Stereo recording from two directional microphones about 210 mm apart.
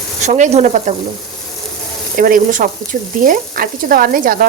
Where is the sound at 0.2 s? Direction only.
35° right (ahead or behind).